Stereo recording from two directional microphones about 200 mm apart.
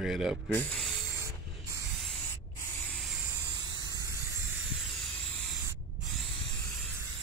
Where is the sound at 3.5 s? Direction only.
20° right (ahead or behind).